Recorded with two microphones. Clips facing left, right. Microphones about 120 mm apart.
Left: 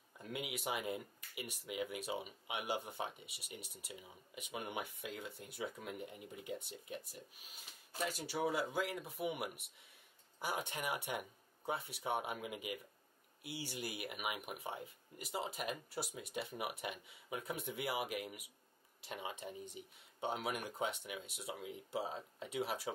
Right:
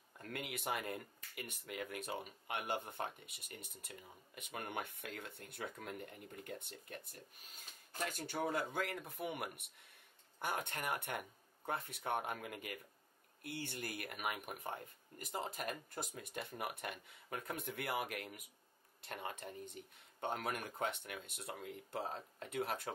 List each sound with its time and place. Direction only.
0.2 s speech: 10° left (ahead or behind)